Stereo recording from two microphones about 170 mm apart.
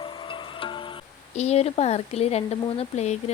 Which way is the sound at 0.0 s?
30° left (ahead or behind).